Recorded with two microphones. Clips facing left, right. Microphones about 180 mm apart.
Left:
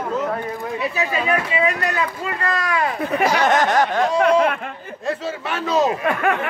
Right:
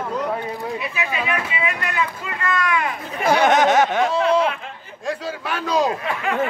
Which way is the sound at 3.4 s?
Centre (ahead or behind).